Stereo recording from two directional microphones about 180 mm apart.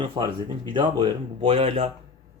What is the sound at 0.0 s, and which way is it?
Speech, 25° right (ahead or behind).